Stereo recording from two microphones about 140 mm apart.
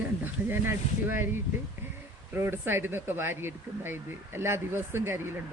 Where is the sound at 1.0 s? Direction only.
15° right (ahead or behind).